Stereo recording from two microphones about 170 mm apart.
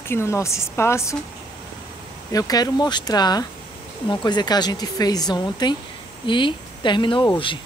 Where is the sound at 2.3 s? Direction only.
20° left (ahead or behind).